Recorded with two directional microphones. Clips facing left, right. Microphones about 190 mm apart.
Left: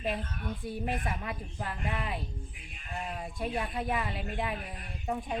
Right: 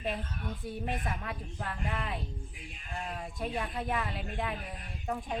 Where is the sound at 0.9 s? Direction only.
5° left (ahead or behind).